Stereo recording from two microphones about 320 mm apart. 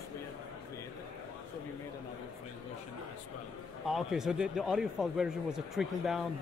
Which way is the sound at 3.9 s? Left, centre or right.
Centre.